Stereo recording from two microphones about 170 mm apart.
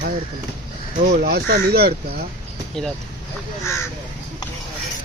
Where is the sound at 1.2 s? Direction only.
70° right (ahead or behind).